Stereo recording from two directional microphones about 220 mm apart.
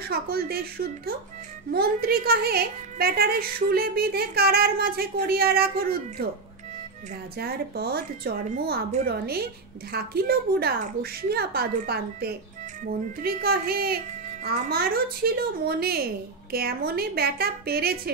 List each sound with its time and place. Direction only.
0.0 s a woman's voice: 45° right (ahead or behind)
7.3 s a woman's voice: 45° right (ahead or behind)